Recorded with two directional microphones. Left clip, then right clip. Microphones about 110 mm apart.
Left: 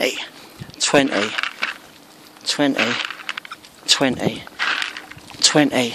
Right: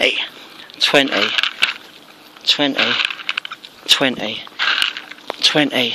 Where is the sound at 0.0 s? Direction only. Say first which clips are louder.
Right 5 dB; 20° left (ahead or behind).